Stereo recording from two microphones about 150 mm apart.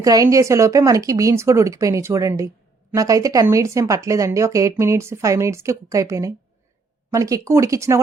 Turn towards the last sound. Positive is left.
turn(degrees=-20)  # may be behind; listen again after turning